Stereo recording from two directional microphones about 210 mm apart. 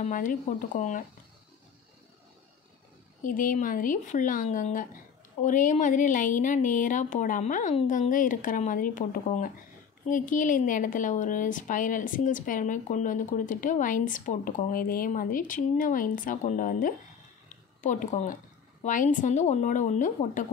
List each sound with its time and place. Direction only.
0.0 s a woman's voice: 40° left (ahead or behind)
3.3 s a woman's voice: 40° left (ahead or behind)
17.5 s a sound: 35° left (ahead or behind)
18.8 s a woman's voice: 35° left (ahead or behind)